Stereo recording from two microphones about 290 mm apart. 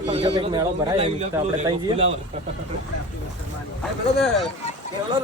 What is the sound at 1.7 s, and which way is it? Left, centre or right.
Speech, centre.